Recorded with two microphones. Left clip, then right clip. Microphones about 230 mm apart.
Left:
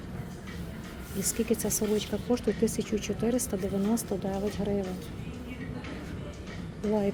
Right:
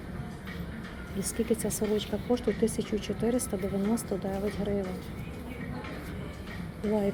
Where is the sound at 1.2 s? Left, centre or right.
Centre.